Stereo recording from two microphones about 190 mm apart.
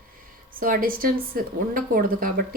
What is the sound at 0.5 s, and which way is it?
A woman's voice, 50° right (ahead or behind).